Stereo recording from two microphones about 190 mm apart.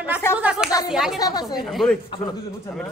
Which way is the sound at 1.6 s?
Centre (ahead or behind).